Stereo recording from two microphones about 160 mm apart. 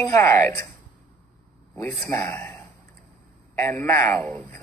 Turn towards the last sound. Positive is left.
turn(degrees=10)  # may be behind; listen again after turning